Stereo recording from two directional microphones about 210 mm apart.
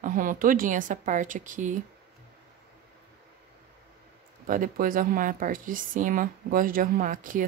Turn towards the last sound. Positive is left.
turn(degrees=-40)  # may be behind; listen again after turning